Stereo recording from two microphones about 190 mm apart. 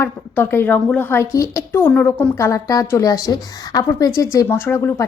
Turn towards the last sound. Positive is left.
turn(degrees=15)  # may be behind; listen again after turning